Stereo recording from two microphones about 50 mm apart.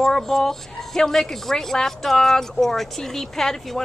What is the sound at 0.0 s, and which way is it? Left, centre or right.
Speech, centre.